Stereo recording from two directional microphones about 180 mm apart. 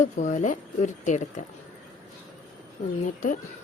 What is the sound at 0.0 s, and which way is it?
Speech, 45° left (ahead or behind).